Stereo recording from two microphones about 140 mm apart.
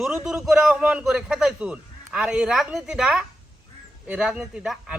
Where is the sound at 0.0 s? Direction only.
5° right (ahead or behind).